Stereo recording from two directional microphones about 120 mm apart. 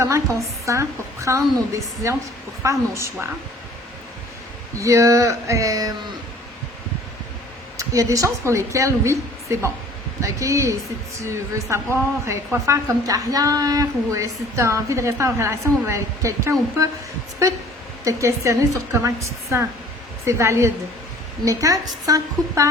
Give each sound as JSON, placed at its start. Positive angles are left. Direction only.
{"t": 0.0, "sound": "a woman's voice", "side_deg": -25}
{"t": 4.8, "sound": "a woman's voice", "side_deg": -25}
{"t": 7.8, "sound": "a woman's voice", "side_deg": -30}
{"t": 18.0, "sound": "a woman's voice", "side_deg": -25}